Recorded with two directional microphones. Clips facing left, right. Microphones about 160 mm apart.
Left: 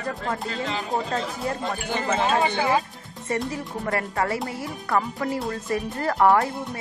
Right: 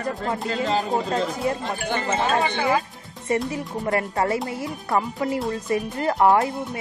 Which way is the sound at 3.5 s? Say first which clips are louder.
Right 3 dB; 20° right (ahead or behind).